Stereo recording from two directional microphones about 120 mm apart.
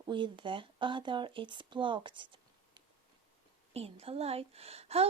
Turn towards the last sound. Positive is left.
turn(degrees=-60)  # may be behind; listen again after turning